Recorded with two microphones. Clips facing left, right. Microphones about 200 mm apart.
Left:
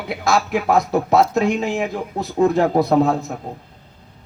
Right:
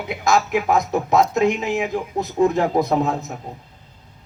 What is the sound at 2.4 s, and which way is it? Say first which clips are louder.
Speech: left 2 dB; 45° left (ahead or behind).